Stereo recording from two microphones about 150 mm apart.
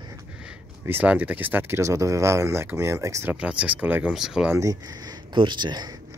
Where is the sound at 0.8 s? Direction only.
15° right (ahead or behind).